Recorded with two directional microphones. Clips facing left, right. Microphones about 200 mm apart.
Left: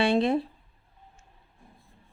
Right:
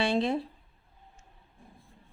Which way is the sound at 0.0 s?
55° left (ahead or behind).